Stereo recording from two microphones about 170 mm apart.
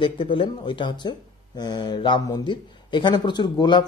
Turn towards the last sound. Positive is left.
turn(degrees=25)  # may be behind; listen again after turning